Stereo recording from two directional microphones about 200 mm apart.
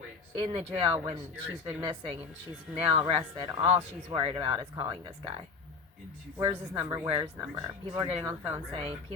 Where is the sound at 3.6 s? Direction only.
10° right (ahead or behind).